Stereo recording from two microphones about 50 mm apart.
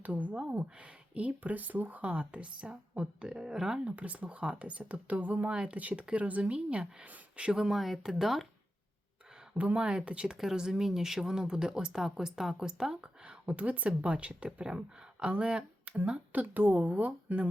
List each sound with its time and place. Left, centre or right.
0.0 s a woman's voice: right
3.2 s speech: centre
3.8 s speech: right
5.5 s speech: centre
5.7 s speech: right
7.6 s speech: centre
9.6 s speech: right
10.3 s speech: centre
13.4 s speech: right
16.3 s a woman's voice: right